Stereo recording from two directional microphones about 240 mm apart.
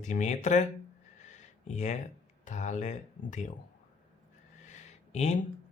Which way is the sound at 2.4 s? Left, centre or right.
Left.